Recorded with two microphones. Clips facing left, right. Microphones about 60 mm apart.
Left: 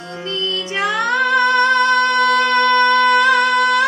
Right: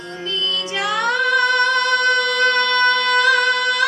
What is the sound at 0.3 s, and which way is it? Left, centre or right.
Music, left.